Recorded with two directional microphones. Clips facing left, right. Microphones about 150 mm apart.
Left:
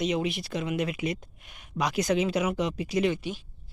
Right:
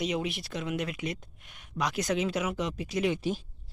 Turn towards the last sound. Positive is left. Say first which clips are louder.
# right 4 dB
turn(degrees=-40)  # may be behind; listen again after turning